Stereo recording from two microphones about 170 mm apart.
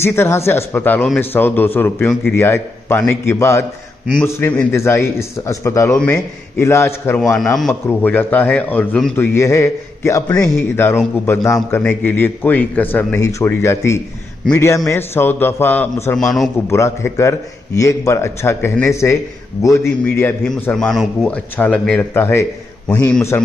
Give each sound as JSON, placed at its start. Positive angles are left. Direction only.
{"t": 0.0, "sound": "a man's voice", "side_deg": 15}
{"t": 5.9, "sound": "a man's voice", "side_deg": 5}
{"t": 7.3, "sound": "a man's voice", "side_deg": 0}
{"t": 16.6, "sound": "a man's voice", "side_deg": 15}
{"t": 20.7, "sound": "a man's voice", "side_deg": 0}